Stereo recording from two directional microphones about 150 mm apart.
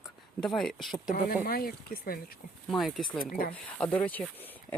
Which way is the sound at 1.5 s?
80° left.